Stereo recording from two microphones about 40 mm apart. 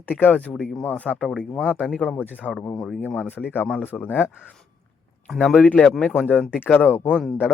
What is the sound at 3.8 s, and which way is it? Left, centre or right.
Speech, left.